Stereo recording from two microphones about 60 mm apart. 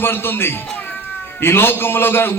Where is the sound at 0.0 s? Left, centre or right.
Left.